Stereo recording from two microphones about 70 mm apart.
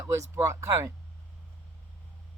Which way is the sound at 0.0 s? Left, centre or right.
Right.